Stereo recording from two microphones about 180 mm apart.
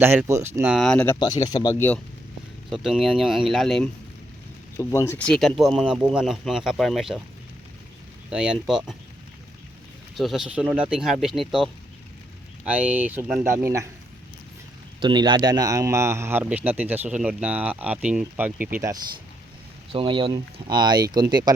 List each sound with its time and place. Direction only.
0.0 s a man's voice: 15° right (ahead or behind); by 1.2 s 10° left (ahead or behind)
1.2 s speech: 20° left (ahead or behind)
2.6 s speech: centre (ahead or behind)
4.8 s speech: 15° left (ahead or behind); by 7.2 s centre (ahead or behind)
8.3 s speech: 5° right (ahead or behind)
10.2 s a man's voice: centre (ahead or behind)
15.0 s a man's voice: 25° right (ahead or behind)
19.9 s speech: 30° right (ahead or behind)